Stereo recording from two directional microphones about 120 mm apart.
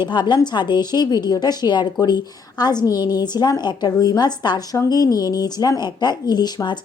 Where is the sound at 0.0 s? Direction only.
40° left (ahead or behind).